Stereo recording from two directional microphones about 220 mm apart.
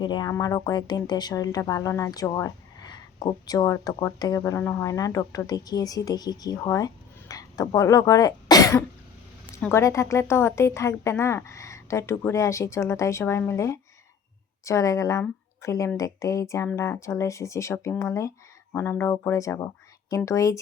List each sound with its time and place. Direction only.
0.0 s speech: 20° left (ahead or behind)